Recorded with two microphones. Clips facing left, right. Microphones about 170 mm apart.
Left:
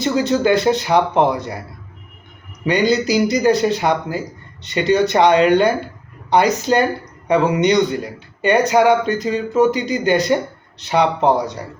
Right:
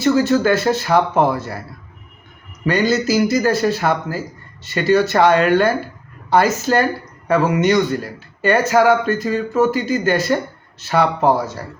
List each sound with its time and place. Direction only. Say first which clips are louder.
0.0 s speech: right 2 dB; 20° left (ahead or behind)
2.9 s speech: even; 15° left (ahead or behind)